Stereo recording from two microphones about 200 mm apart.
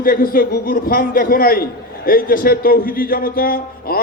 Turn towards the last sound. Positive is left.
turn(degrees=45)  # may be behind; listen again after turning